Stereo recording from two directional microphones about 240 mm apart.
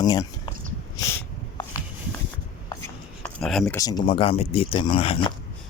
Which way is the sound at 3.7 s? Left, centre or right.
Centre.